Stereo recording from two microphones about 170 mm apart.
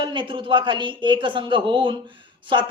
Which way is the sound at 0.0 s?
30° right (ahead or behind).